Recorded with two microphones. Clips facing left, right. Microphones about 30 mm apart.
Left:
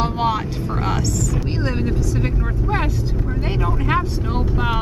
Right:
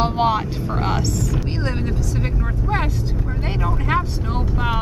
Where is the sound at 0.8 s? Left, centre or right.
Centre.